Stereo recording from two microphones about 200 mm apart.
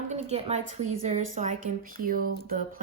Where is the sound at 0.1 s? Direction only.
30° right (ahead or behind).